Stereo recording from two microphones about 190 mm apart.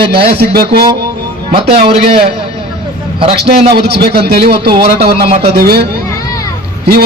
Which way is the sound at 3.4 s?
60° right (ahead or behind).